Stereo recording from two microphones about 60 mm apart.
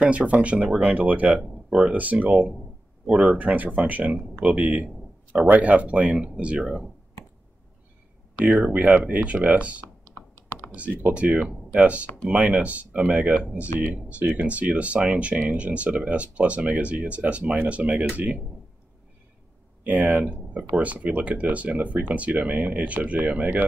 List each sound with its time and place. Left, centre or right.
0.0 s speech: right
1.4 s speech: centre
1.9 s speech: right
3.3 s speech: right
6.6 s speech: centre
8.4 s speech: right
19.8 s speech: right